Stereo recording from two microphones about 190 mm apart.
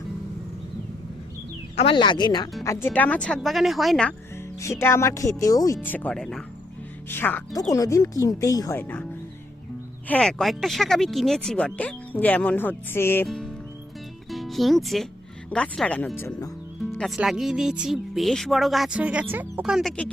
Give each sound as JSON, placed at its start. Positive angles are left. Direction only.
{"t": 1.7, "sound": "speech", "side_deg": 30}
{"t": 4.6, "sound": "speech", "side_deg": 15}
{"t": 10.1, "sound": "speech", "side_deg": 5}
{"t": 13.2, "sound": "speech", "side_deg": 0}
{"t": 16.9, "sound": "speech", "side_deg": 0}